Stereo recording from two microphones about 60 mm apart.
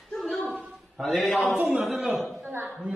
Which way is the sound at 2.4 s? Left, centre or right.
Right.